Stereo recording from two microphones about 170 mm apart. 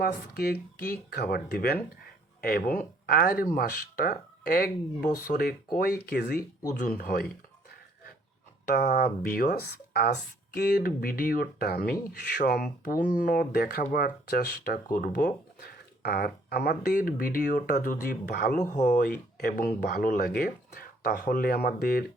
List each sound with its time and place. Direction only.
0.0 s speech: 70° left (ahead or behind)
8.6 s speech: 65° left (ahead or behind)
18.5 s speech: 45° left (ahead or behind); by 22.0 s 65° left (ahead or behind)